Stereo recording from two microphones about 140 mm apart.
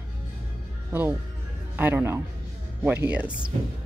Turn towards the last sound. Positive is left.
turn(degrees=-10)  # may be behind; listen again after turning